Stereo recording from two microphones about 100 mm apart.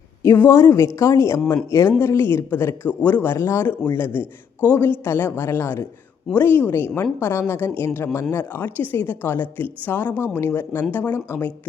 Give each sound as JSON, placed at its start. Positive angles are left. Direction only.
{"t": 0.2, "sound": "speech", "side_deg": 25}